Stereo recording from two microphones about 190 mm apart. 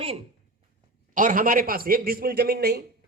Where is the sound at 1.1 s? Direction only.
45° right (ahead or behind).